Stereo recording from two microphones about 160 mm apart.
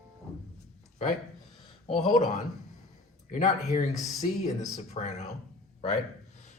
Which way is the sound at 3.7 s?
45° left (ahead or behind).